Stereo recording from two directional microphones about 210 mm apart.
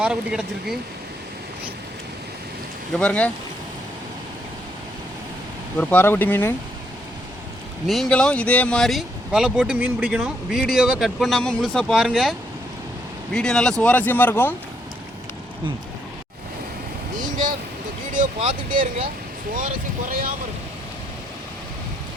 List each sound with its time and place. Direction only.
0.0 s speech: 5° right (ahead or behind)
2.9 s speech: 5° left (ahead or behind)
5.8 s speech: 10° left (ahead or behind)
7.9 s speech: centre (ahead or behind)
17.2 s a sound: 35° right (ahead or behind)
18.7 s speech: 40° right (ahead or behind)